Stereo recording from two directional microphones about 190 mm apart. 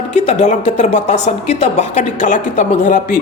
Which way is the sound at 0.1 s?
35° left (ahead or behind).